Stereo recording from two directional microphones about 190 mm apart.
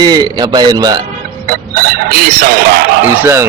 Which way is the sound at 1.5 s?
55° right (ahead or behind).